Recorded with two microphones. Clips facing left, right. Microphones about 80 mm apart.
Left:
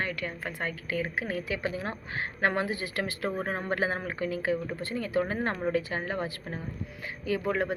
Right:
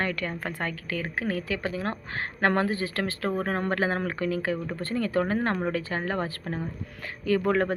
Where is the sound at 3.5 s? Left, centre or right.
Right.